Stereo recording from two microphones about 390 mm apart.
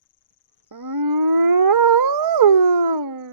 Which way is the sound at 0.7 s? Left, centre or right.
Right.